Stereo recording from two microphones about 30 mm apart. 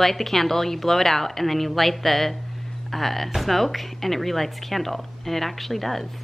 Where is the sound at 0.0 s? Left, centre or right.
Centre.